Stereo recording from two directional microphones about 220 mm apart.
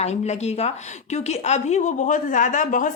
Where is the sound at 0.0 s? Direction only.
30° left (ahead or behind).